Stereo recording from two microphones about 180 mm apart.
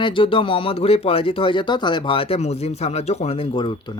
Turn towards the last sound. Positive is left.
turn(degrees=25)  # may be behind; listen again after turning